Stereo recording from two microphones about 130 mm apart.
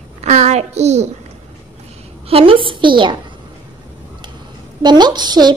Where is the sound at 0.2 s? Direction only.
60° right (ahead or behind).